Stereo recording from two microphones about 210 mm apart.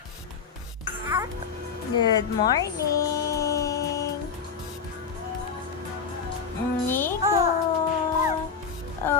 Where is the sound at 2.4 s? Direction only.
15° left (ahead or behind).